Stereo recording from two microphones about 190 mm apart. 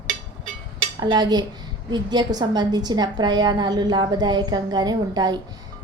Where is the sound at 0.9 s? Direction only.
20° right (ahead or behind).